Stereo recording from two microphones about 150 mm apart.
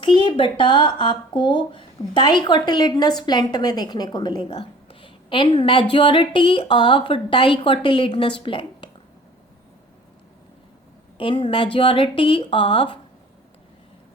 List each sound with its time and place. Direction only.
0.0 s a woman's voice: 30° left (ahead or behind)
11.2 s a woman's voice: 35° left (ahead or behind)